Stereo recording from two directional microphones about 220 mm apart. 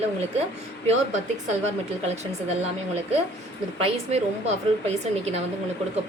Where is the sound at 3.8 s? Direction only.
30° right (ahead or behind).